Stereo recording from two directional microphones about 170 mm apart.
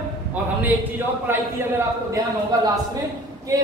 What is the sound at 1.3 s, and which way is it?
A man's voice, 15° right (ahead or behind).